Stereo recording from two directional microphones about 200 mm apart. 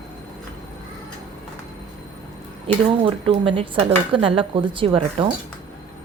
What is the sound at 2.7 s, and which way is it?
Speech, 25° right (ahead or behind).